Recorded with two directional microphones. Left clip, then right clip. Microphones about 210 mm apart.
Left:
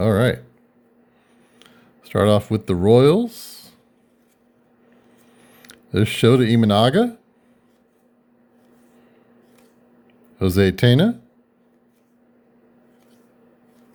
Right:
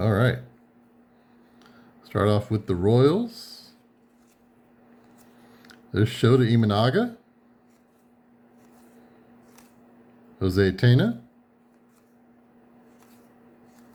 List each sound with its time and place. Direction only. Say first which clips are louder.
0.0 s a sound: left 6 dB; 40° left (ahead or behind)
1.5 s speech: left 3 dB; 40° left (ahead or behind)
5.7 s speech: left 5 dB; 45° left (ahead or behind)
10.3 s speech: left 4 dB; 45° left (ahead or behind)